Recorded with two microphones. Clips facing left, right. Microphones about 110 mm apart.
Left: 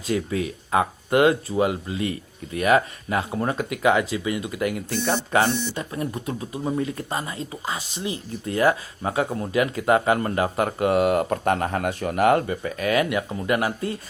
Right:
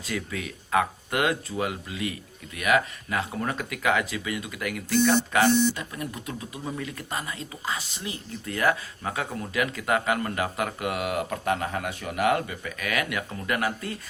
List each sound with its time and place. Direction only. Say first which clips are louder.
0.0 s speech: left 8 dB; 30° left (ahead or behind)